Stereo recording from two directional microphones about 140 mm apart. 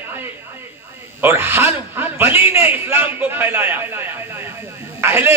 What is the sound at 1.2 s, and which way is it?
A man's voice, 15° right (ahead or behind).